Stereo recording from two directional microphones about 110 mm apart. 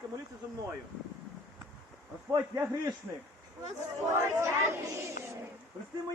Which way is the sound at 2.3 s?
30° right (ahead or behind).